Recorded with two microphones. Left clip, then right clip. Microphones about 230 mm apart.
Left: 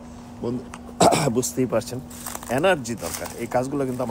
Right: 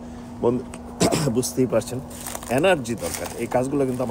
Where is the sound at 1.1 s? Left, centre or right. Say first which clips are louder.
Left 3 dB; centre.